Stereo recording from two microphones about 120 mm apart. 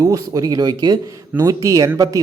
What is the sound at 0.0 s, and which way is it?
Speech, 30° right (ahead or behind).